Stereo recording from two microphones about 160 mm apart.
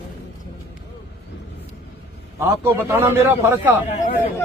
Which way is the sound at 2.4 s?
15° right (ahead or behind).